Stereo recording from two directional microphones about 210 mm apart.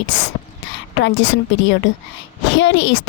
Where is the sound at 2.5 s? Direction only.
60° left (ahead or behind).